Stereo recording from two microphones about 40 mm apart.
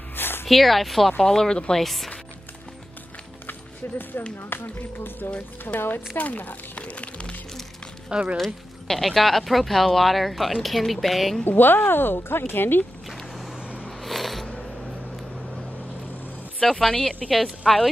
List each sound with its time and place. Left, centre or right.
0.1 s a sound: left
0.5 s speech: centre
1.2 s speech: centre
3.8 s speech: left
6.1 s speech: left
6.8 s music: left
8.1 s speech: right
8.8 s speech: centre
11.4 s speech: left
13.3 s vehicle: centre
13.6 s a sound: right
14.0 s a sound: centre
15.3 s vehicle: centre
16.8 s speech: centre